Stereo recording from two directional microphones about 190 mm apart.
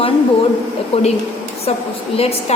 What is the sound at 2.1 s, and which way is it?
Speech, 30° left (ahead or behind).